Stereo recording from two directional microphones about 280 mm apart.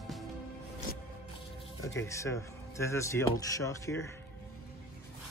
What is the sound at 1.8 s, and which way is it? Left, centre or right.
Speech, centre.